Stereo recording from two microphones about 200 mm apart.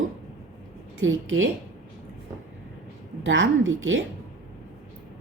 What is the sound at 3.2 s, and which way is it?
Speech, 70° right (ahead or behind).